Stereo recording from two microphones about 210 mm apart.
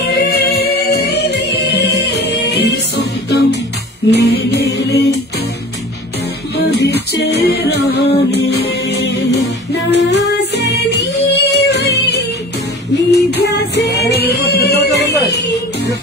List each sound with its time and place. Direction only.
0.0 s music: 50° left (ahead or behind)
6.5 s music: 50° left (ahead or behind)
12.9 s music: 55° left (ahead or behind)